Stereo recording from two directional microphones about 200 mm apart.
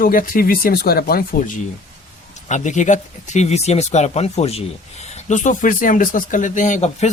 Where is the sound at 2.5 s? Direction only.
35° left (ahead or behind).